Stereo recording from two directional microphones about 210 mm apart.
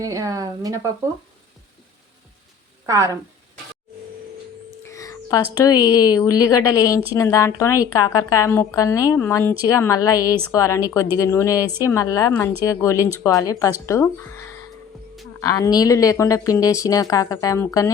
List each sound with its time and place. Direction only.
0.0 s speech: 15° right (ahead or behind)
2.8 s speech: 15° right (ahead or behind)
4.9 s a sound: 15° left (ahead or behind)
5.9 s speech: 15° left (ahead or behind)
15.4 s speech: 15° left (ahead or behind)